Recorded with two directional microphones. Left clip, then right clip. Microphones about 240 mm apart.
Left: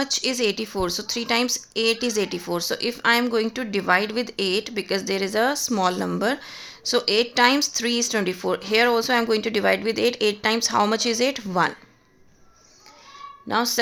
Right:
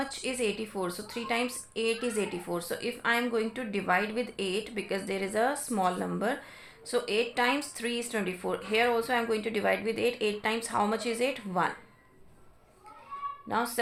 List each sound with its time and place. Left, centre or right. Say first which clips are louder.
0.0 s a woman's voice: left 9 dB; left
13.5 s a woman's voice: left 8 dB; left